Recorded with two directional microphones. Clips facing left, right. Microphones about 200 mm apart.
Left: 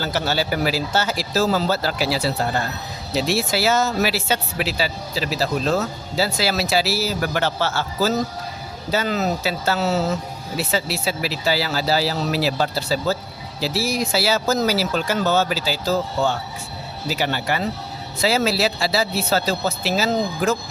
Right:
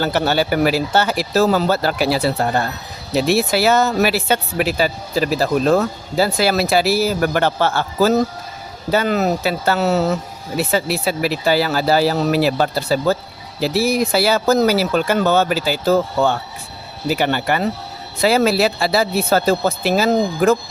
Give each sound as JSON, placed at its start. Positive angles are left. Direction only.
{"t": 0.0, "sound": "speech", "side_deg": -60}